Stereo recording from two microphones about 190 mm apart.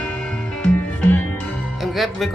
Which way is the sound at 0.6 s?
10° left (ahead or behind).